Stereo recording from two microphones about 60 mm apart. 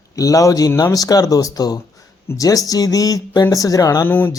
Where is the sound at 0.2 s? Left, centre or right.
Left.